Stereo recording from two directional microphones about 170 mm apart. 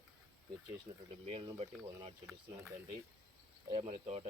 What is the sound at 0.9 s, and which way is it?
Speech, 35° right (ahead or behind).